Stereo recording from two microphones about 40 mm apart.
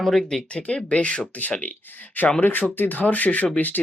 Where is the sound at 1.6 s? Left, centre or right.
Left.